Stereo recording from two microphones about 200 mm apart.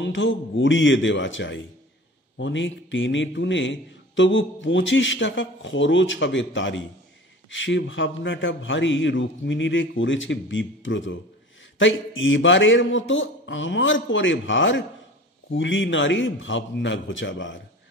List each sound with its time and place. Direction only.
0.0 s a man's voice: 65° left (ahead or behind)